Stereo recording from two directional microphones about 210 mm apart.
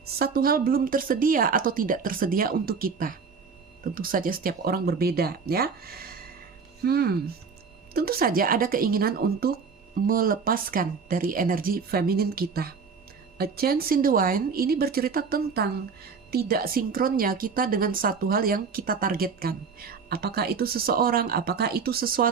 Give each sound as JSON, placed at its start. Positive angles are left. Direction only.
{"t": 0.2, "sound": "a woman's voice", "side_deg": -45}